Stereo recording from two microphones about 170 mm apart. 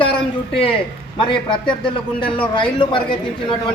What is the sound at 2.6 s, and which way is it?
Speech, 30° left (ahead or behind).